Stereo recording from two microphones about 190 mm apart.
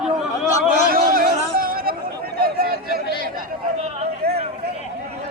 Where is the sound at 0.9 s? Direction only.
50° right (ahead or behind).